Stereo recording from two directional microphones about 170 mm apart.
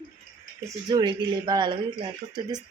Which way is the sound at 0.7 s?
25° right (ahead or behind).